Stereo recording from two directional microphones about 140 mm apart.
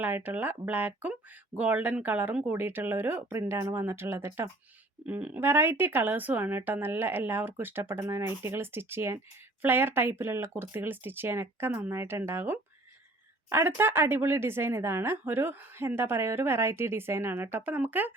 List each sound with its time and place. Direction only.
0.0 s speech: 15° right (ahead or behind)